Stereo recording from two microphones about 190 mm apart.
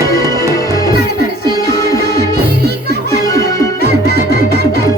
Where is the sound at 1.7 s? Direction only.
15° left (ahead or behind).